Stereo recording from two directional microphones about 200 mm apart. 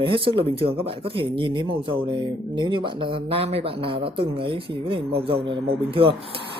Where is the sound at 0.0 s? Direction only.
25° right (ahead or behind).